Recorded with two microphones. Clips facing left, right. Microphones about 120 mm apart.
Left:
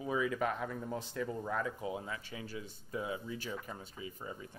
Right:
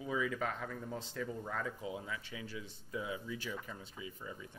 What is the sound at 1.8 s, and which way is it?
Speech, 45° left (ahead or behind).